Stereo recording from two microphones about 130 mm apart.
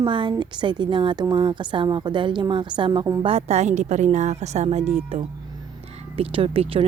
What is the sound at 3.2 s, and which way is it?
A woman's voice, 50° right (ahead or behind).